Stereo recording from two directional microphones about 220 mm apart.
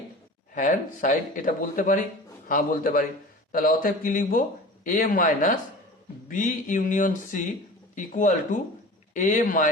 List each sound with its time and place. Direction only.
0.5 s a man's voice: 35° left (ahead or behind)